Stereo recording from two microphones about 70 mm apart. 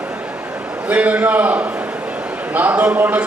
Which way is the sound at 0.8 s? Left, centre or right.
Right.